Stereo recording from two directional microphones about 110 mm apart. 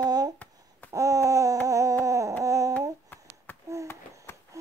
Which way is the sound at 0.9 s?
30° right (ahead or behind).